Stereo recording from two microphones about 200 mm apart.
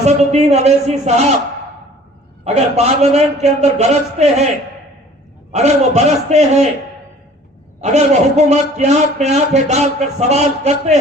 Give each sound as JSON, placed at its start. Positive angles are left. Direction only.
{"t": 0.0, "sound": "a man's voice", "side_deg": -35}
{"t": 2.4, "sound": "a man's voice", "side_deg": -30}
{"t": 5.5, "sound": "a man's voice", "side_deg": -35}
{"t": 7.8, "sound": "a man's voice", "side_deg": -35}